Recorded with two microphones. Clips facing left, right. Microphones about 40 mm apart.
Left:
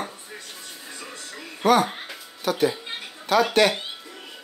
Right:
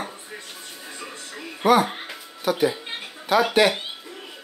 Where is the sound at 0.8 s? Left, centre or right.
Centre.